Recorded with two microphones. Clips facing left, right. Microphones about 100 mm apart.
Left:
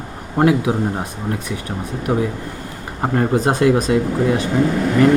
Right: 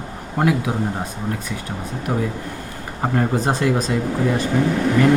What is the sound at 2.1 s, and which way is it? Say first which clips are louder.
Speech: left 4 dB; 15° left (ahead or behind).